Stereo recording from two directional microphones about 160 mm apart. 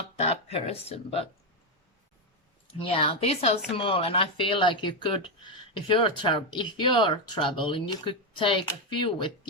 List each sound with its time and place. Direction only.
0.2 s speech: 40° left (ahead or behind)
2.7 s speech: 35° left (ahead or behind)